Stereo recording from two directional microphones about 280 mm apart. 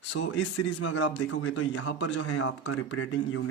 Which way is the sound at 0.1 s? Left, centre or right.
Left.